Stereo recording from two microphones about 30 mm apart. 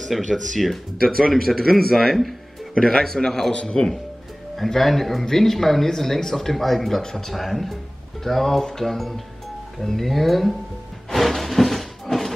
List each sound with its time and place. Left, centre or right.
0.3 s speech: centre
1.0 s speech: centre
2.7 s a man's voice: left
3.8 s a man's voice: left
4.7 s speech: centre
7.0 s speech: centre
7.3 s speech: centre
11.1 s a sound: centre